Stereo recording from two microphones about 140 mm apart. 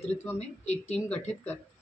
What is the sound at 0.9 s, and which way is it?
Speech, 10° left (ahead or behind).